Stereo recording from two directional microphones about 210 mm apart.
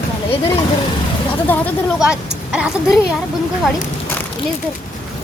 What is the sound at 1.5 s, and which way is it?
A woman's voice, 5° left (ahead or behind).